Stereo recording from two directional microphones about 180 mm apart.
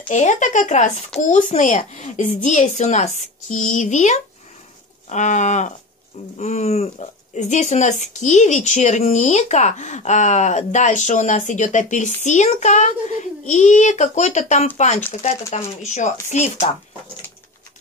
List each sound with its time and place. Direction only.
0.1 s speech: 40° left (ahead or behind)